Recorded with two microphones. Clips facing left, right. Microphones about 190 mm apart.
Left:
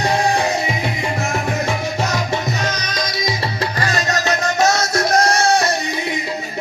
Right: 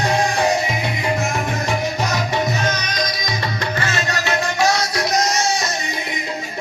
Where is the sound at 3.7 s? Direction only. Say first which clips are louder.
Left 2 dB; 40° left (ahead or behind); by 5.7 s 60° left (ahead or behind).